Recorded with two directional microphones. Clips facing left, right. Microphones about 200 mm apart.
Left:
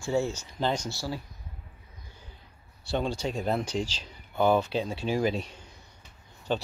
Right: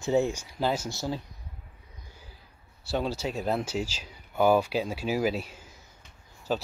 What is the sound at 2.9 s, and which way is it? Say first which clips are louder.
Speech: even; 5° right (ahead or behind).